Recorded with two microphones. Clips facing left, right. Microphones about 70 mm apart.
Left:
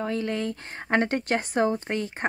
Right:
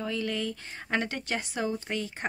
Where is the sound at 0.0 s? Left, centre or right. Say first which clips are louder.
Left 4 dB; left.